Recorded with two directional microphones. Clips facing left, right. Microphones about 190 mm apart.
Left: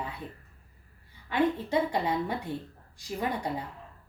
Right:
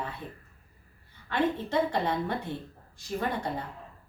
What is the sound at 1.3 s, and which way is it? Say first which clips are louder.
A woman's voice: left 1 dB; 10° left (ahead or behind).